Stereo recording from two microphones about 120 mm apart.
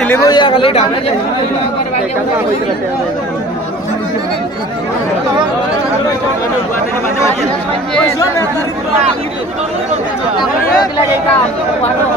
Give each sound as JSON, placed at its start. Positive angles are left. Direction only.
{"t": 0.2, "sound": "speech", "side_deg": 35}
{"t": 0.5, "sound": "speech", "side_deg": 50}